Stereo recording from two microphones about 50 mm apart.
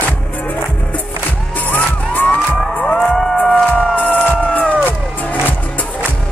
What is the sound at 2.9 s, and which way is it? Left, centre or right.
Music, centre.